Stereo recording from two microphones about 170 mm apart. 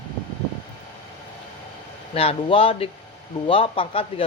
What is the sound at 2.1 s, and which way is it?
Speech, 35° left (ahead or behind).